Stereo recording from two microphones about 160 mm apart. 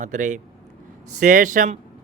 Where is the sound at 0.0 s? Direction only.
50° right (ahead or behind).